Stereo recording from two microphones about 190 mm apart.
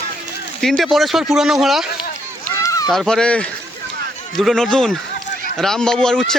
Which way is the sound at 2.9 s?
Centre (ahead or behind).